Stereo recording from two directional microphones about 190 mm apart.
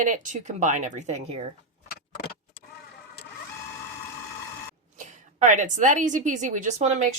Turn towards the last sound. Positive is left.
turn(degrees=-35)  # may be behind; listen again after turning